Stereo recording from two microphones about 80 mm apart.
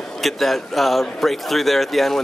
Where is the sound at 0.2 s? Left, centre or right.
Centre.